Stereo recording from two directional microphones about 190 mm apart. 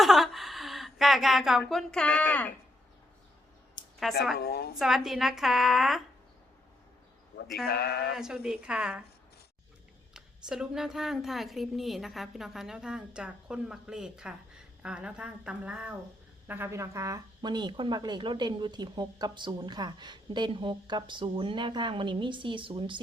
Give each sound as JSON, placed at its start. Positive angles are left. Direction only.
{"t": 0.0, "sound": "a sound", "side_deg": 0}
{"t": 4.0, "sound": "a woman's voice", "side_deg": 0}
{"t": 4.4, "sound": "speech", "side_deg": 55}
{"t": 4.8, "sound": "a woman's voice", "side_deg": 0}
{"t": 7.6, "sound": "speech", "side_deg": 55}
{"t": 8.1, "sound": "a woman's voice", "side_deg": -5}
{"t": 10.2, "sound": "a woman's voice", "side_deg": -5}